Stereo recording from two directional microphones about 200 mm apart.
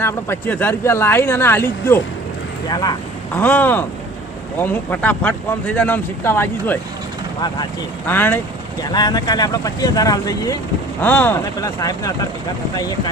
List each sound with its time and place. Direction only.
0.0 s speech: 10° left (ahead or behind)
3.3 s speech: 10° left (ahead or behind)
8.0 s speech: 10° left (ahead or behind)